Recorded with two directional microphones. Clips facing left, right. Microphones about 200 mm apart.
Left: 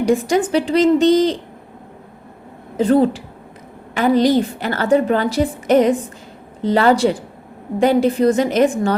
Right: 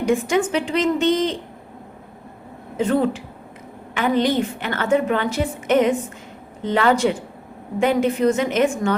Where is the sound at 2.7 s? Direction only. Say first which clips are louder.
Left 5 dB; 35° left (ahead or behind).